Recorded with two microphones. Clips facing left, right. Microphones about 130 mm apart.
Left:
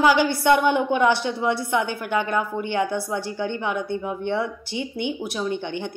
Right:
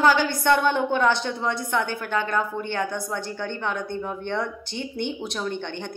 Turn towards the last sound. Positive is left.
turn(degrees=10)  # may be behind; listen again after turning